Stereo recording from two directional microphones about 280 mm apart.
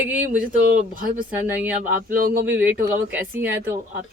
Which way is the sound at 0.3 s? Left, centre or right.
Right.